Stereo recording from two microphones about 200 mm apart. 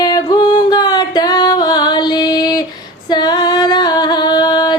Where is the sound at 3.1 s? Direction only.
20° left (ahead or behind).